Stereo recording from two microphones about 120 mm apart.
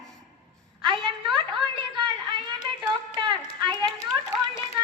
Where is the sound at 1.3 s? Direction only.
40° right (ahead or behind).